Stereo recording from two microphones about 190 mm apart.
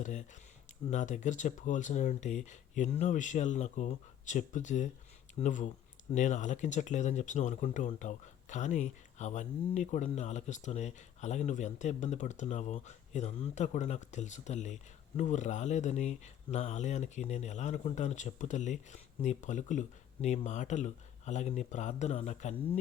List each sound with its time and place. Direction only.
0.0 s speech: 40° left (ahead or behind)